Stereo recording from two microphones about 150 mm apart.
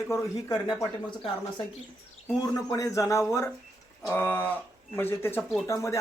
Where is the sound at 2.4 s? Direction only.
25° left (ahead or behind).